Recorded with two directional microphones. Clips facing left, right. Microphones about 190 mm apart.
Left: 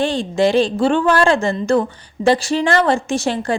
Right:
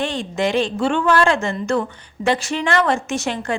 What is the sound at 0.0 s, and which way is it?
A woman's voice, 30° left (ahead or behind).